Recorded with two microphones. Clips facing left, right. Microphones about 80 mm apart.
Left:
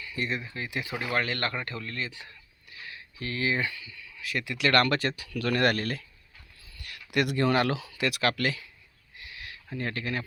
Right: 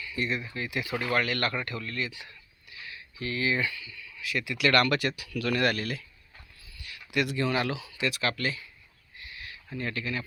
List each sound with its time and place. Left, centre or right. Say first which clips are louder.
0.0 s speech: right 1 dB; left
9.1 s owl: even; left
9.6 s speech: left 1 dB; left